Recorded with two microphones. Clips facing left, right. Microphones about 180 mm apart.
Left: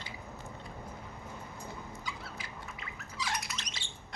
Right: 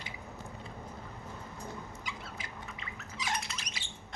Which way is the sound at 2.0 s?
20° right (ahead or behind).